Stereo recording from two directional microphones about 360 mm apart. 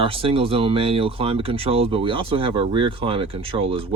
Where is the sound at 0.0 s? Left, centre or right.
Centre.